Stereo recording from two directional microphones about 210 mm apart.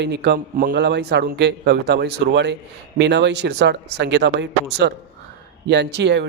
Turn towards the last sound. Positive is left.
turn(degrees=-55)  # may be behind; listen again after turning